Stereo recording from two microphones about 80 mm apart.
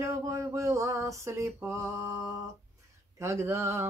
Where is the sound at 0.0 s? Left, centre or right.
Right.